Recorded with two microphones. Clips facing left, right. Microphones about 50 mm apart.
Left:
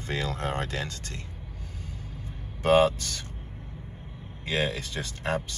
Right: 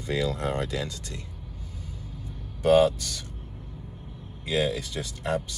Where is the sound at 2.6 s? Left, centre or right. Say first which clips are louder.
Right 1 dB; left.